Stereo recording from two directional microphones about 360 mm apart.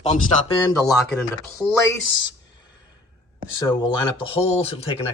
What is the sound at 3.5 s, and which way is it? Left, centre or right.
Speech, centre.